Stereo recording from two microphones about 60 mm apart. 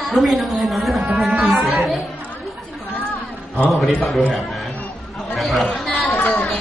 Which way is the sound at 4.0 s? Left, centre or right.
Centre.